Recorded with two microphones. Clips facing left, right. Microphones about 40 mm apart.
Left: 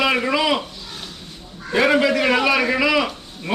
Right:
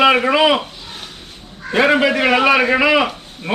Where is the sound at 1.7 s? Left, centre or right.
Right.